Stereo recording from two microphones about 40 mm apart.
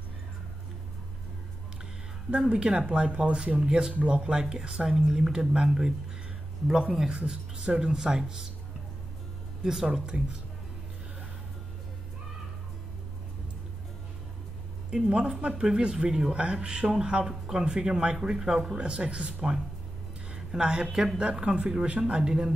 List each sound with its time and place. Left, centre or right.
2.5 s speech: right
3.6 s speech: centre
3.9 s speech: right; by 8.5 s centre
9.6 s speech: centre
9.8 s speech: right
14.9 s speech: right
16.3 s speech: right
18.8 s speech: right
20.3 s speech: centre